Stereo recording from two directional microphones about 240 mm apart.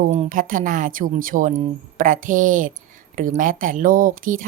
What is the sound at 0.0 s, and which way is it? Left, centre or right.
A woman's voice, right.